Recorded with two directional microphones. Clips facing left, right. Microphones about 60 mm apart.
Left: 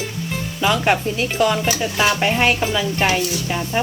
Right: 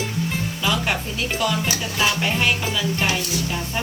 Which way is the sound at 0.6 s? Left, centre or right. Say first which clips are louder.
Left 7 dB; left.